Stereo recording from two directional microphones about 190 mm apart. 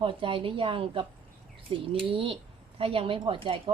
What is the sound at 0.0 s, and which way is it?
A woman's voice, 25° right (ahead or behind).